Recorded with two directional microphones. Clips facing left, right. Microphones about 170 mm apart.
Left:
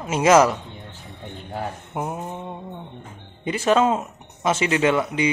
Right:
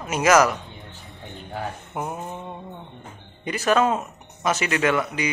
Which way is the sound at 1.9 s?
20° left (ahead or behind).